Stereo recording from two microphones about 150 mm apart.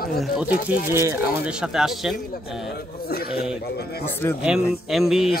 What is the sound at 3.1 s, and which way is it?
Speech, 90° left.